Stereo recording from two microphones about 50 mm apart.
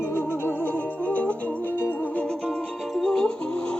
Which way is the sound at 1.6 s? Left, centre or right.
Left.